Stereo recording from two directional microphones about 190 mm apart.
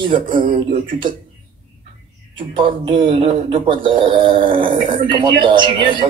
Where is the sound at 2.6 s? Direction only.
25° right (ahead or behind).